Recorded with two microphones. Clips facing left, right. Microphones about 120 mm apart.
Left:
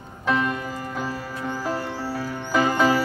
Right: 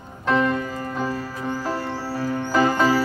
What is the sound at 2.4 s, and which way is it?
Music, 5° left (ahead or behind).